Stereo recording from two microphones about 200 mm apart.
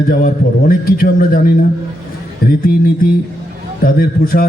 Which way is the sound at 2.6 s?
45° left (ahead or behind).